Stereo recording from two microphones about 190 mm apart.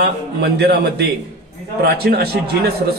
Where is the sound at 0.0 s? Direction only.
55° right (ahead or behind).